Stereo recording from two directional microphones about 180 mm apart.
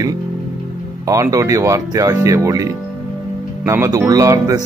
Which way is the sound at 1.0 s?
15° right (ahead or behind).